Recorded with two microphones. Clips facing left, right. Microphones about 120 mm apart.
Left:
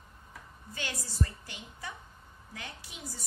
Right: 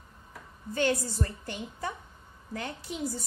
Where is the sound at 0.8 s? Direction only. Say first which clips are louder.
Right 9 dB; 50° right (ahead or behind).